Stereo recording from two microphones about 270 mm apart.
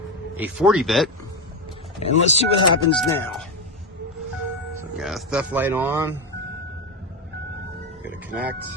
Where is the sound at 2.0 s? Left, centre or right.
Left.